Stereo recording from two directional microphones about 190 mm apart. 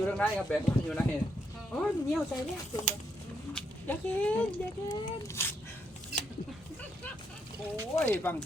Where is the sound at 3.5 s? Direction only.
5° left (ahead or behind).